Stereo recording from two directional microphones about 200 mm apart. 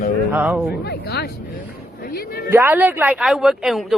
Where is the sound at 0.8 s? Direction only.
50° left (ahead or behind).